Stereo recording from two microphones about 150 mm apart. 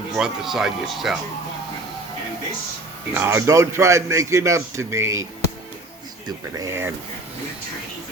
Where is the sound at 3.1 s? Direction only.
15° right (ahead or behind).